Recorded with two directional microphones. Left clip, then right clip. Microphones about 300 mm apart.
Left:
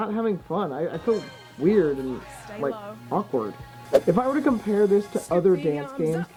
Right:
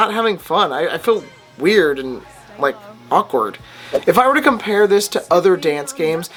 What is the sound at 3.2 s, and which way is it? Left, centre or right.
Speech, centre.